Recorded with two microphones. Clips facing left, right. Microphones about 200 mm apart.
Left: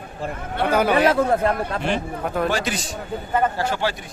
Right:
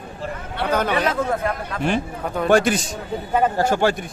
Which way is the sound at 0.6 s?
10° left (ahead or behind).